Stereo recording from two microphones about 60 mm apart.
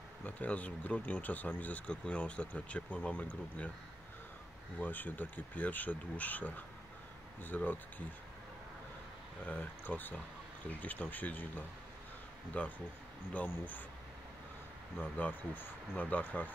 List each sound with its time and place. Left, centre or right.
0.2 s speech: left
4.7 s speech: left
9.4 s speech: left
15.0 s speech: left